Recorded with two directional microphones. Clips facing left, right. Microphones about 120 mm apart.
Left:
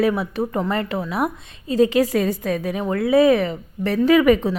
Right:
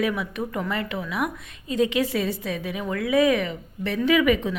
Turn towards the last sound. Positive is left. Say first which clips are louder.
# left 5 dB
turn(degrees=40)  # may be behind; listen again after turning